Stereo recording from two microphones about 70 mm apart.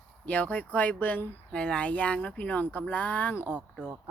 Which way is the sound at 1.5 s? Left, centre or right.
Centre.